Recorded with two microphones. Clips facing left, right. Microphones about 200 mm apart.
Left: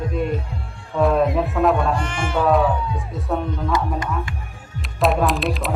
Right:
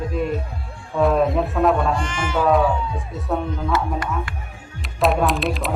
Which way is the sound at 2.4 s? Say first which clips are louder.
Even; centre (ahead or behind).